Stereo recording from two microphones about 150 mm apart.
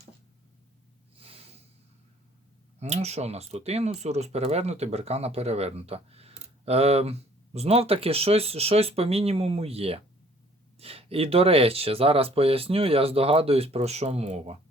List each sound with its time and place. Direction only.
2.8 s speech: 45° right (ahead or behind)